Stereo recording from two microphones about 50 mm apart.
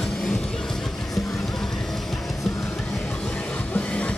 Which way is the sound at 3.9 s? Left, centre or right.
Left.